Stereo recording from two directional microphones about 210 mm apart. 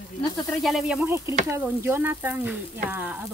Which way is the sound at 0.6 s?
5° right (ahead or behind).